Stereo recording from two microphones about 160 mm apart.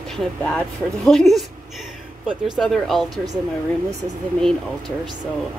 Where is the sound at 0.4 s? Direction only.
5° left (ahead or behind).